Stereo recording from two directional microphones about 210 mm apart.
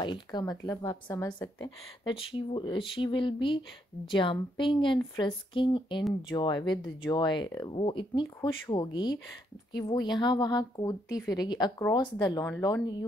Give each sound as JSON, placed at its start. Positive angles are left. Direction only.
{"t": 0.0, "sound": "a woman's voice", "side_deg": 20}